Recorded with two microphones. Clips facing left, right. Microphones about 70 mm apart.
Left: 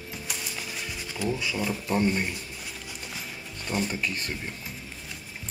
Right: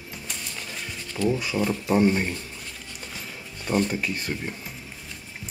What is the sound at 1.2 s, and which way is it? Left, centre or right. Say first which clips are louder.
Speech: right 5 dB; centre.